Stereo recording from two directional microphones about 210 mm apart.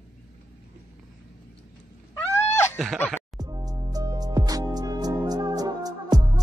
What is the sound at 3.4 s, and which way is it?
Music, 15° right (ahead or behind).